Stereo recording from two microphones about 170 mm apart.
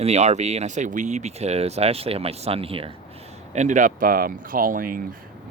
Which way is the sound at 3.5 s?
45° right (ahead or behind).